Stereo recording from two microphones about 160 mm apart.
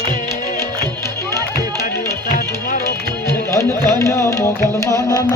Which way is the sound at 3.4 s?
20° left (ahead or behind).